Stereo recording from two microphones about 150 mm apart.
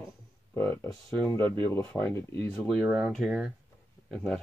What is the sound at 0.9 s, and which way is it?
Speech, 5° left (ahead or behind).